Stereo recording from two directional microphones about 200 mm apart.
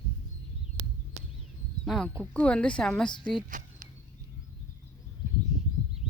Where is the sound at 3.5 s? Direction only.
40° right (ahead or behind).